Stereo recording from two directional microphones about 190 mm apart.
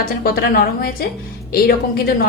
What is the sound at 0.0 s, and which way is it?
Speech, 50° left (ahead or behind).